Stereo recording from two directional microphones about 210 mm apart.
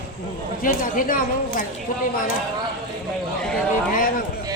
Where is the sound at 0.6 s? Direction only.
40° left (ahead or behind).